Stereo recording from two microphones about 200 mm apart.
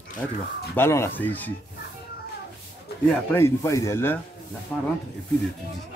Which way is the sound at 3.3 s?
15° left (ahead or behind).